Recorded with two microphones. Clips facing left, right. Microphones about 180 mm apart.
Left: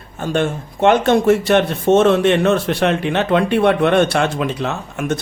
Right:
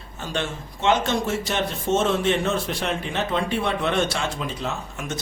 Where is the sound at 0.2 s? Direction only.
50° left (ahead or behind).